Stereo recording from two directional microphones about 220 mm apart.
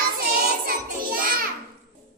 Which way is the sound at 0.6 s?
40° right (ahead or behind).